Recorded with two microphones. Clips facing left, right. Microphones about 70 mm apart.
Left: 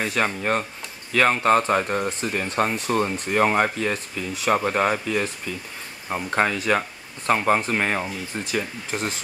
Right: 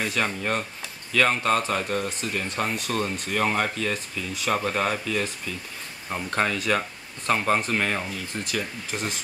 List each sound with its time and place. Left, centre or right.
0.0 s speech: centre